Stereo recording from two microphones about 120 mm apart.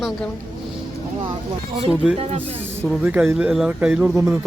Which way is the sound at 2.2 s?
55° right (ahead or behind).